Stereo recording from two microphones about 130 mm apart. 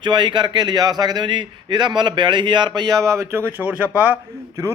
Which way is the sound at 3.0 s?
25° right (ahead or behind).